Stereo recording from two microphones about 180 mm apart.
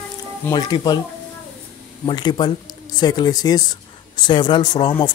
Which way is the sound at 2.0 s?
25° left (ahead or behind).